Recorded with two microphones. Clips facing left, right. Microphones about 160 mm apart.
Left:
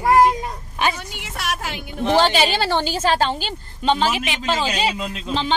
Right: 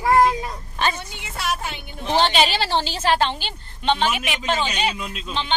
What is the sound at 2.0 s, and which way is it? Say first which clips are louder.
A woman's voice: left 2 dB; 45° left (ahead or behind).